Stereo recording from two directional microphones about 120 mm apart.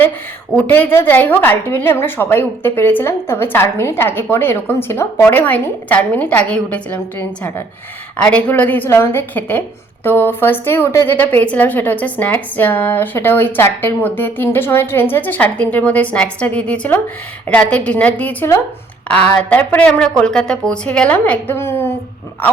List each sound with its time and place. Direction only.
0.5 s a woman's voice: 15° left (ahead or behind)